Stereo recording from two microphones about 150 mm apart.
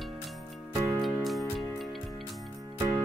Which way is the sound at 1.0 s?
Centre (ahead or behind).